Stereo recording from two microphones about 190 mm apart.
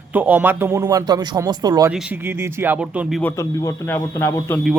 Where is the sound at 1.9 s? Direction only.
5° right (ahead or behind).